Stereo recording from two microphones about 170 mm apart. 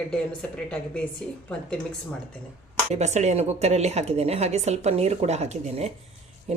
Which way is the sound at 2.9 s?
40° right (ahead or behind).